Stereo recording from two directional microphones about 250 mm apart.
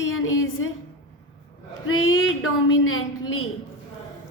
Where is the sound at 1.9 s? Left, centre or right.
Left.